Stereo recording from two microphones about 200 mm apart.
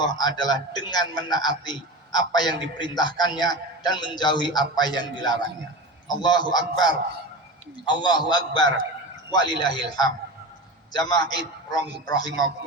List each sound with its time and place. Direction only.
0.0 s a man's voice: 20° left (ahead or behind)
8.0 s a man's voice: 20° left (ahead or behind)